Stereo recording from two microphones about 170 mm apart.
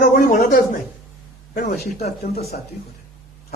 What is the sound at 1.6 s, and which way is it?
Speech, 60° left (ahead or behind).